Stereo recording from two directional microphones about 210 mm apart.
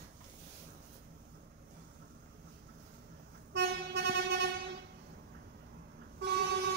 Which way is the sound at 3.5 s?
50° right (ahead or behind).